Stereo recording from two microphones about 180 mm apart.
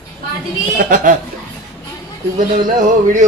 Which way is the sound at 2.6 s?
45° right (ahead or behind).